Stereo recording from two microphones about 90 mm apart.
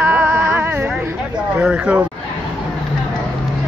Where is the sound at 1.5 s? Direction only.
10° right (ahead or behind).